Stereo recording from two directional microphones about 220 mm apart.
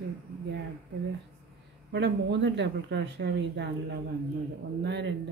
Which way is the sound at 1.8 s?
50° right (ahead or behind).